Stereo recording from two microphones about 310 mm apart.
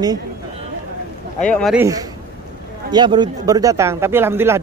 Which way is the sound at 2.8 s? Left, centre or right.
Centre.